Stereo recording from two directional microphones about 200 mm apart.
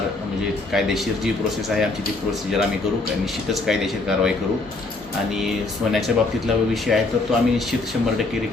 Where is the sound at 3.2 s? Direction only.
Centre (ahead or behind).